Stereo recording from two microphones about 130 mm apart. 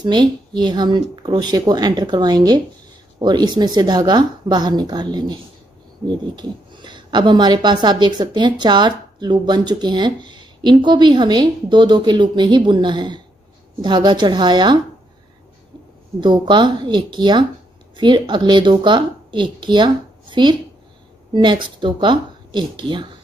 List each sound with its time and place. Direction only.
0.0 s speech: 35° right (ahead or behind)
16.2 s a woman's voice: 35° right (ahead or behind)